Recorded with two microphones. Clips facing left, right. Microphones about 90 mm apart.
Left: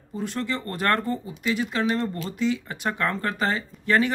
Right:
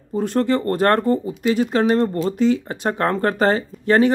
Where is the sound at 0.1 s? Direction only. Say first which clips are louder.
Right 10 dB; 45° right (ahead or behind).